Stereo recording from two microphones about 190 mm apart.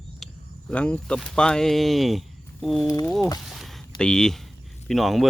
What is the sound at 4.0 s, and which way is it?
Speech, 5° left (ahead or behind).